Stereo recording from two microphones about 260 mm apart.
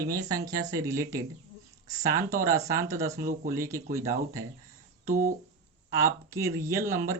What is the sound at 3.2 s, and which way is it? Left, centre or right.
Speech, right.